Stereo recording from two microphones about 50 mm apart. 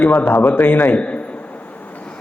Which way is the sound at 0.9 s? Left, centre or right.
Left.